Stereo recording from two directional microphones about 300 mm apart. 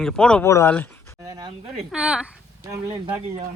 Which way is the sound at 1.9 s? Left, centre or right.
Centre.